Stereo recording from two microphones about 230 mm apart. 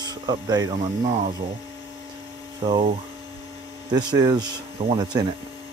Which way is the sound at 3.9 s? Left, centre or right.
Centre.